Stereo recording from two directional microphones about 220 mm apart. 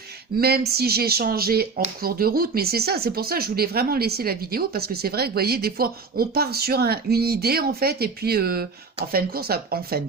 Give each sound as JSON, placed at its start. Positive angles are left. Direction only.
{"t": 0.3, "sound": "speech", "side_deg": -45}